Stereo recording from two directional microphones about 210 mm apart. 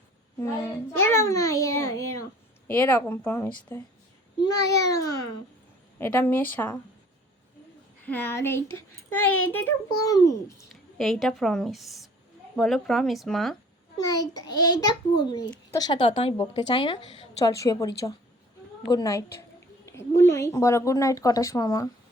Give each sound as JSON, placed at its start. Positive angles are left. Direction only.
{"t": 0.3, "sound": "a sound", "side_deg": 10}
{"t": 2.6, "sound": "speech", "side_deg": 10}
{"t": 8.0, "sound": "speech", "side_deg": 10}
{"t": 9.0, "sound": "a child's voice", "side_deg": 90}
{"t": 9.5, "sound": "speech", "side_deg": 10}
{"t": 10.9, "sound": "speech", "side_deg": 0}
{"t": 14.4, "sound": "a woman's voice", "side_deg": 20}